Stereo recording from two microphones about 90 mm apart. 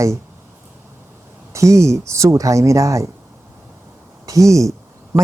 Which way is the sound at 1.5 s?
35° right (ahead or behind).